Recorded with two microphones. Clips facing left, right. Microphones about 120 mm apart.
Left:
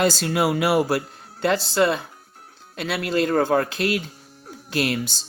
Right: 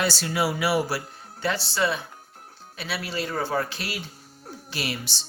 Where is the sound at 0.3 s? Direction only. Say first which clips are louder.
Left 4 dB; 55° left (ahead or behind).